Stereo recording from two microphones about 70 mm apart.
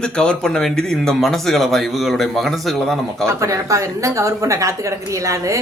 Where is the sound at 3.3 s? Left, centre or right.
Right.